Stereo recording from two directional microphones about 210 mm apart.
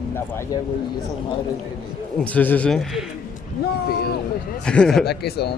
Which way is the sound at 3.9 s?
50° left (ahead or behind).